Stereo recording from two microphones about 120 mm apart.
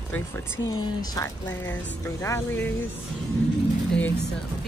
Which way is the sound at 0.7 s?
35° left (ahead or behind).